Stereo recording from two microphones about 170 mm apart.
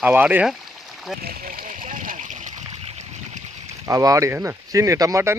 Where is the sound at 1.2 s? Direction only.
60° right (ahead or behind); by 3.7 s 45° right (ahead or behind).